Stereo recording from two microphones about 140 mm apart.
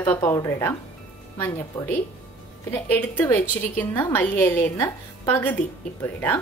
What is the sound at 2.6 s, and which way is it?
A woman's voice, 15° left (ahead or behind).